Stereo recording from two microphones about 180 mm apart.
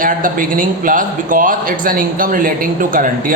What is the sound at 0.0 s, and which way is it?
A man's voice, 50° right (ahead or behind).